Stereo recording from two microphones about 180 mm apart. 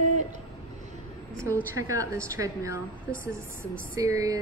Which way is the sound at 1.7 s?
20° right (ahead or behind).